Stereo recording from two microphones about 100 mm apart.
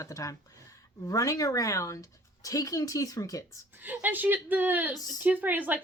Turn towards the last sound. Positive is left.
turn(degrees=-15)  # may be behind; listen again after turning